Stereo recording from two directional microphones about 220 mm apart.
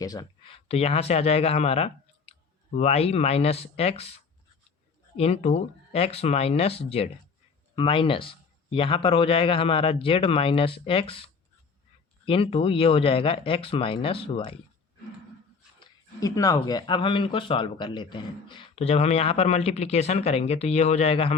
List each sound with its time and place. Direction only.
0.0 s speech: 15° left (ahead or behind)
5.1 s speech: 30° left (ahead or behind)
15.8 s speech: 15° left (ahead or behind)